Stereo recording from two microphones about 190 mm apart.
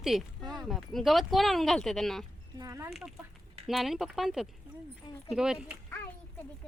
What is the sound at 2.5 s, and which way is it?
Speech, 15° right (ahead or behind).